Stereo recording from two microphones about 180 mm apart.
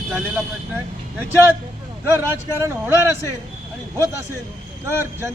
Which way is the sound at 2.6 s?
15° right (ahead or behind).